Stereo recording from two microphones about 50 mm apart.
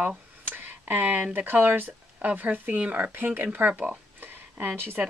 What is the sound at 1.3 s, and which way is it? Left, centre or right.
Speech, right.